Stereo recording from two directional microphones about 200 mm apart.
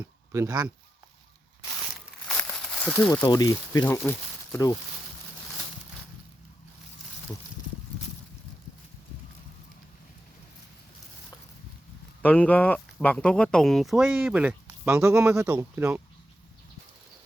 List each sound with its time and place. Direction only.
0.0 s speech: 15° right (ahead or behind)
2.2 s crumpling: 5° left (ahead or behind)
3.2 s speech: 20° left (ahead or behind)
12.2 s speech: 5° left (ahead or behind); by 16.0 s 10° right (ahead or behind)